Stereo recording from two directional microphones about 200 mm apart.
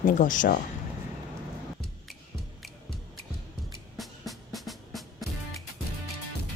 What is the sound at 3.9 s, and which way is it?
Music, centre (ahead or behind).